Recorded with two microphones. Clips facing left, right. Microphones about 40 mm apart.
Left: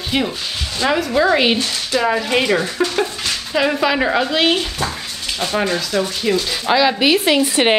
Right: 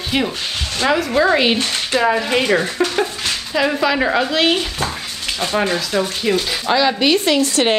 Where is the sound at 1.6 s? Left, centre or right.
Right.